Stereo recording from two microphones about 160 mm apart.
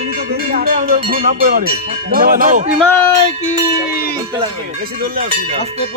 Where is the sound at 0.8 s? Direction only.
40° right (ahead or behind).